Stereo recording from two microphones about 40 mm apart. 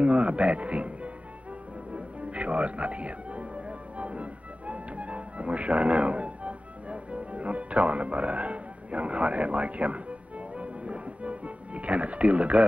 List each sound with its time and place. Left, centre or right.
0.0 s speech: right
1.9 s music: right